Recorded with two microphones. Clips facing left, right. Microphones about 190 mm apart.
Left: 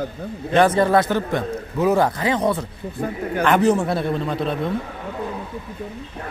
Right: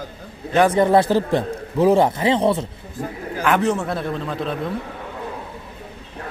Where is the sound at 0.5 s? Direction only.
15° right (ahead or behind).